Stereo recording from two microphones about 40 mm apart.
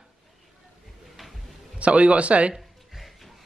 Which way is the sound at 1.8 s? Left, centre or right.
Right.